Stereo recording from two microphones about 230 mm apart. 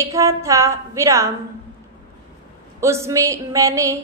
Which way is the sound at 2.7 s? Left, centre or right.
Centre.